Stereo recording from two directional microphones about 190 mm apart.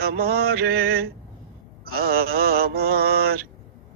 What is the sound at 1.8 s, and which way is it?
Mantra, 55° right (ahead or behind).